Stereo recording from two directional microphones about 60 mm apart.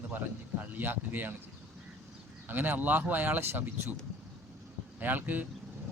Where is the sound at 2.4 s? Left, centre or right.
Right.